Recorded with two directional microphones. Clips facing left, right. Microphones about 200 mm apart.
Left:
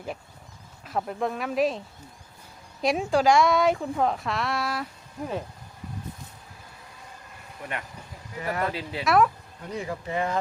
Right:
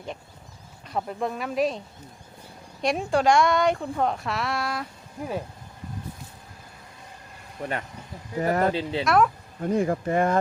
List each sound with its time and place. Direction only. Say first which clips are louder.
0.9 s speech: even; centre (ahead or behind)
2.8 s speech: even; centre (ahead or behind)
7.6 s speech: right 5 dB; 35° right (ahead or behind)
8.7 s speech: right 6 dB; 25° right (ahead or behind)
9.0 s speech: even; centre (ahead or behind)
9.6 s speech: right 9 dB; 50° right (ahead or behind)